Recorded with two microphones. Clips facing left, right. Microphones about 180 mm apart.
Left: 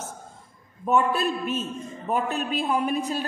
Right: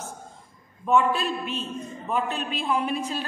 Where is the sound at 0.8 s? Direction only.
45° left (ahead or behind).